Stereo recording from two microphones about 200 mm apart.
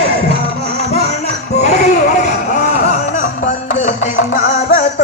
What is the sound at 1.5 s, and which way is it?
Music, 35° left (ahead or behind).